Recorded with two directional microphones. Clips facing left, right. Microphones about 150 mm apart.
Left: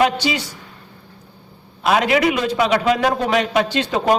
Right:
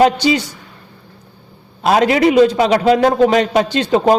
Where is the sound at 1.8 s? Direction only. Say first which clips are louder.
Right 4 dB; 35° right (ahead or behind).